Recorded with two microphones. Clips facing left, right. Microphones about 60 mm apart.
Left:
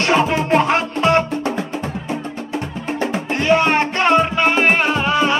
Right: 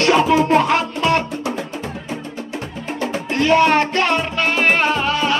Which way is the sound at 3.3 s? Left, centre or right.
Centre.